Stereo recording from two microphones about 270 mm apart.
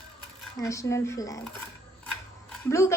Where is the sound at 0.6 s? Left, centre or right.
Centre.